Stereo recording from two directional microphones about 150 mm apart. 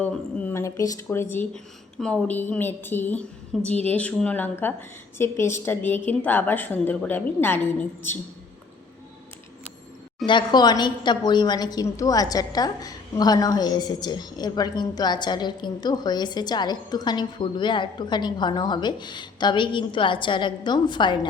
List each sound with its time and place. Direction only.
0.0 s a woman's voice: 10° left (ahead or behind)
10.2 s a woman's voice: 30° left (ahead or behind)